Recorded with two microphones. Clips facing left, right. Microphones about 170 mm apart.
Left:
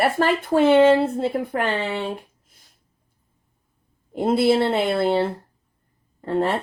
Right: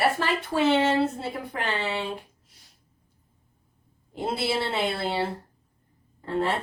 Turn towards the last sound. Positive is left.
turn(degrees=55)  # may be behind; listen again after turning